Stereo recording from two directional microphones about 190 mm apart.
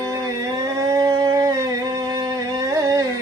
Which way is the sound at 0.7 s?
20° right (ahead or behind).